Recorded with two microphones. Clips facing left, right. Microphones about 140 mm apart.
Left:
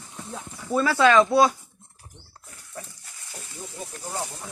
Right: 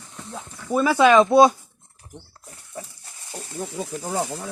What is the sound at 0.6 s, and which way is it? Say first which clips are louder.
Speech: right 3 dB; 15° right (ahead or behind).